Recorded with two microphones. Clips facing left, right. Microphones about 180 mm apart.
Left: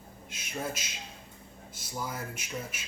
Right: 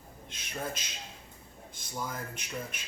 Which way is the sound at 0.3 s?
10° left (ahead or behind).